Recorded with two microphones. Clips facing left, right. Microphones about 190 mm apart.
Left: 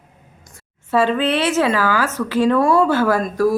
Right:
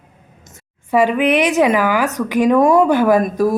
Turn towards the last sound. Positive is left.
turn(degrees=-20)  # may be behind; listen again after turning